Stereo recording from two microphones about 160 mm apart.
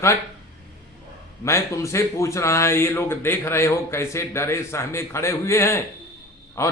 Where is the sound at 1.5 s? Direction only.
20° left (ahead or behind).